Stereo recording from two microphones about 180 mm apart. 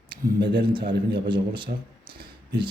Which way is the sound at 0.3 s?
70° right (ahead or behind).